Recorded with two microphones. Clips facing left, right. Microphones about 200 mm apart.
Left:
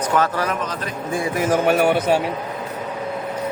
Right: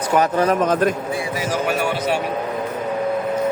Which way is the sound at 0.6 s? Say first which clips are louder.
Right 11 dB; 50° right (ahead or behind).